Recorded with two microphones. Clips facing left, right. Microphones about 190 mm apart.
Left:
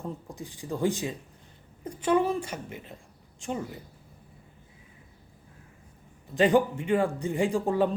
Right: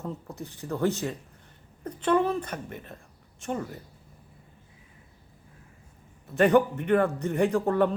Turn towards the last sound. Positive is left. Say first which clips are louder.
# right 2 dB
turn(degrees=10)  # may be behind; listen again after turning